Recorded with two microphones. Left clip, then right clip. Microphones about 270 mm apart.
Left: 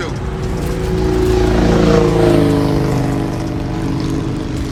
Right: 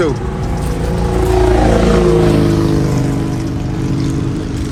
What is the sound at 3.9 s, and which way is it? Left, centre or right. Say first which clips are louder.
Vehicle: right 2 dB; left.